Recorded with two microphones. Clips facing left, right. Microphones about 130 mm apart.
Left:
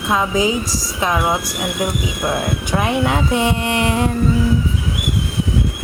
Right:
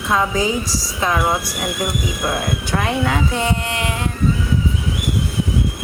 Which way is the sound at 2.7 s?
15° left (ahead or behind).